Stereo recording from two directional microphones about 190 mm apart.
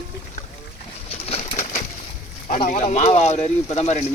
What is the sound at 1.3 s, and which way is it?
Pigeon, 35° left (ahead or behind).